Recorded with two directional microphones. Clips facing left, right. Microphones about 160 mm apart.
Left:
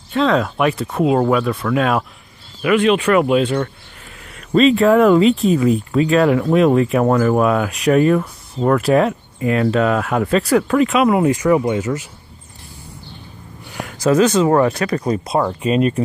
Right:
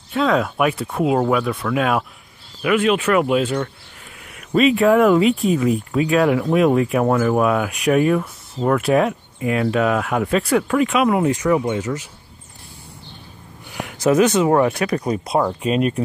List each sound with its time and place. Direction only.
0.1 s speech: 5° right (ahead or behind)
4.6 s speech: 5° right (ahead or behind)
13.8 s speech: 15° right (ahead or behind); by 16.0 s centre (ahead or behind)